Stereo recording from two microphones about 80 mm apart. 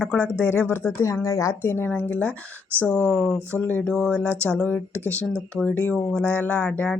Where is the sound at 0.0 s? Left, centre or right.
Centre; by 1.5 s left.